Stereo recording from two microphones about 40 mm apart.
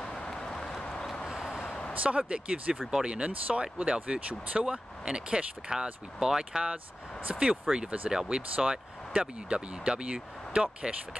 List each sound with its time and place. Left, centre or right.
0.0 s vehicle: centre
1.3 s vehicle: centre
1.6 s a sound: left
2.0 s speech: right
3.3 s speech: right
3.7 s speech: right
7.7 s speech: centre
8.1 s speech: centre